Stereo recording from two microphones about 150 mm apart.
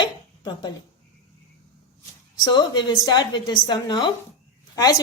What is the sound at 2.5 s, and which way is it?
A woman's voice, 30° left (ahead or behind).